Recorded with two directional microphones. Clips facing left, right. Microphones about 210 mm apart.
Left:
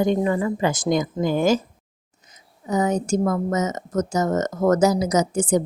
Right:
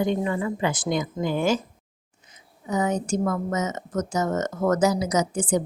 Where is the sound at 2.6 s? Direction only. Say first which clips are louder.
Left 3 dB; 40° left (ahead or behind).